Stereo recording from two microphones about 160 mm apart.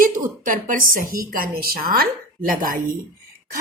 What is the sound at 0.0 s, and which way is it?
A woman's voice, 60° right (ahead or behind).